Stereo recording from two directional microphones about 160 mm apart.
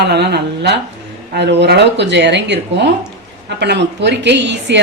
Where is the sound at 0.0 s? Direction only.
90° right.